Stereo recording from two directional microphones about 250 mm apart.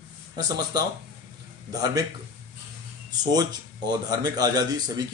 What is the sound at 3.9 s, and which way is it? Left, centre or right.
Speech, centre.